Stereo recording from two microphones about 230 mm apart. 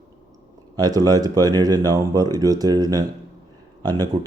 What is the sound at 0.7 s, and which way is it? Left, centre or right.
Speech, centre.